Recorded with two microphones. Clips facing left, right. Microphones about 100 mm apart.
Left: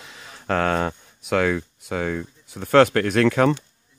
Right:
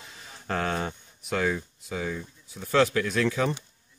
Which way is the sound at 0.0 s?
90° left.